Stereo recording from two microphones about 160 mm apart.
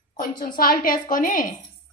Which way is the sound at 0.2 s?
65° left (ahead or behind).